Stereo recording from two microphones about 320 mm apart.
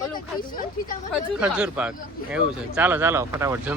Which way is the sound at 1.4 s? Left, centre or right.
Centre.